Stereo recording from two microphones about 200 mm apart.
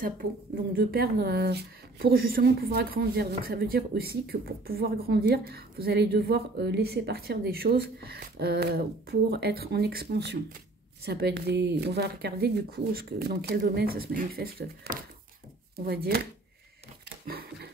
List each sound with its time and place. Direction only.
0.7 s speech: 50° right (ahead or behind)
17.3 s speech: 50° right (ahead or behind)